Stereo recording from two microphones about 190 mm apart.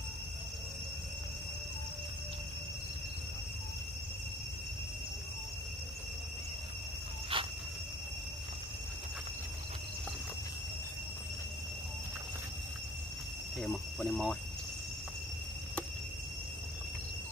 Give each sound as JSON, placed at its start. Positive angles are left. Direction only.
{"t": 7.3, "sound": "insect", "side_deg": -25}
{"t": 13.6, "sound": "speech", "side_deg": 0}